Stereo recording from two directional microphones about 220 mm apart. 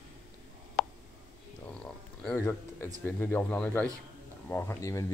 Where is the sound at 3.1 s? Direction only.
10° left (ahead or behind).